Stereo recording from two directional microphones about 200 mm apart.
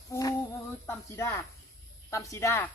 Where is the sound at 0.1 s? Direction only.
15° left (ahead or behind).